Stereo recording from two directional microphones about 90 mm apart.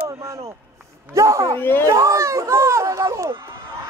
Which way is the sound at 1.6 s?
25° left (ahead or behind).